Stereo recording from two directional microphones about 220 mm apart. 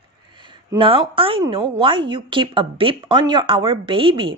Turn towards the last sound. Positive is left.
turn(degrees=-20)  # may be behind; listen again after turning